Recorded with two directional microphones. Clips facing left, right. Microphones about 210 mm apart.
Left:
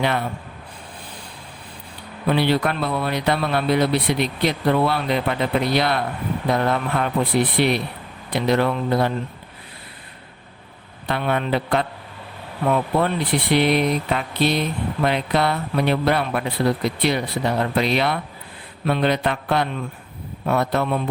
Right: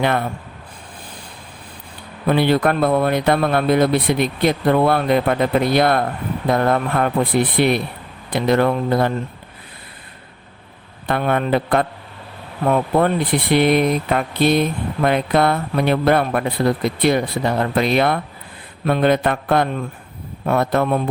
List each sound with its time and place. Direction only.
2.3 s speech: 50° right (ahead or behind)
11.1 s speech: 50° right (ahead or behind)